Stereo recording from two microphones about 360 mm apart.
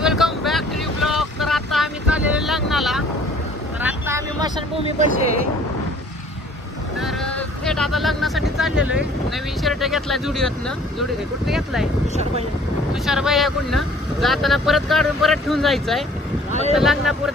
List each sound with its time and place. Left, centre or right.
0.0 s boat: centre
3.8 s vehicle: centre
7.0 s speech: centre
12.9 s speech: centre